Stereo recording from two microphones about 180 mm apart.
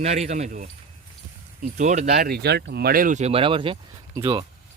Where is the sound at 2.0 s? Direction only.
60° right (ahead or behind); by 4.4 s 25° right (ahead or behind).